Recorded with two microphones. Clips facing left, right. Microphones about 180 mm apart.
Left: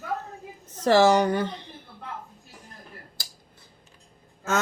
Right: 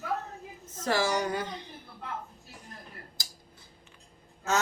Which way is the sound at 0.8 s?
60° left (ahead or behind).